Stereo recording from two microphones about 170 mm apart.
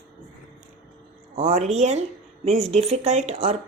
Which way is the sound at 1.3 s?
40° right (ahead or behind).